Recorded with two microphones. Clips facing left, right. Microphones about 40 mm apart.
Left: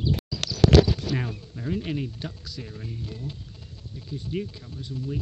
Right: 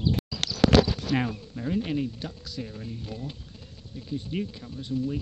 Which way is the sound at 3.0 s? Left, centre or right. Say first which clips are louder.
Even; centre.